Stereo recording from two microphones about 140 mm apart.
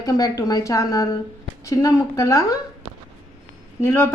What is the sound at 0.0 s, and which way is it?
A woman's voice, 25° left (ahead or behind).